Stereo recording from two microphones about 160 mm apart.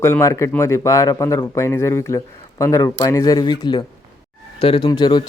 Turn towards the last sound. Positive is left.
turn(degrees=30)  # may be behind; listen again after turning